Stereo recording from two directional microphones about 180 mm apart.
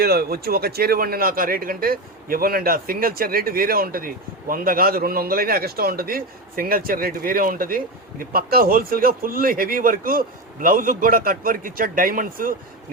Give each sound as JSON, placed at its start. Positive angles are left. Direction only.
{"t": 0.0, "sound": "speech", "side_deg": -60}